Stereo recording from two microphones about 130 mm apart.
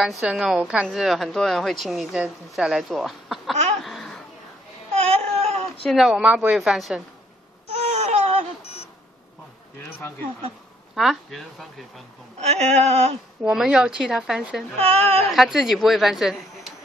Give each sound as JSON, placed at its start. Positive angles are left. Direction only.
{"t": 0.2, "sound": "speech", "side_deg": -5}
{"t": 3.8, "sound": "a sound", "side_deg": 0}
{"t": 4.9, "sound": "baby cry", "side_deg": -50}
{"t": 5.9, "sound": "speech", "side_deg": -5}
{"t": 7.8, "sound": "a sound", "side_deg": -50}
{"t": 11.0, "sound": "speech", "side_deg": 0}
{"t": 12.4, "sound": "speech", "side_deg": -55}
{"t": 13.4, "sound": "speech", "side_deg": -5}
{"t": 14.8, "sound": "speech", "side_deg": -50}
{"t": 15.3, "sound": "speech", "side_deg": 0}